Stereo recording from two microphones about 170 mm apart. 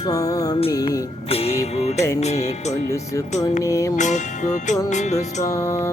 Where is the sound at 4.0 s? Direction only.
45° left (ahead or behind).